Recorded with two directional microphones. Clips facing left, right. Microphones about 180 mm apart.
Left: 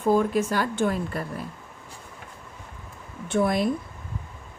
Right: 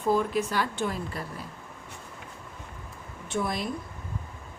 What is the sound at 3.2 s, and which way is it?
Speech, 55° left (ahead or behind).